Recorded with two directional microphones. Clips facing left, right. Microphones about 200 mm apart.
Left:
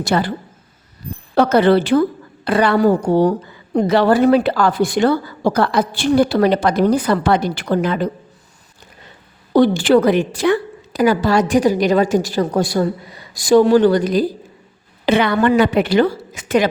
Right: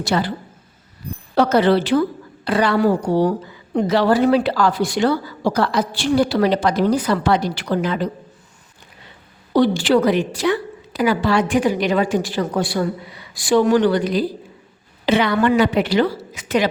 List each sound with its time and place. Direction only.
0.0 s a woman's voice: 50° left (ahead or behind)
1.4 s a woman's voice: 55° left (ahead or behind)
9.5 s a woman's voice: 50° left (ahead or behind)